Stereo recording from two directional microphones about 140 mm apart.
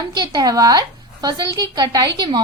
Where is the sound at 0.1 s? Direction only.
30° right (ahead or behind).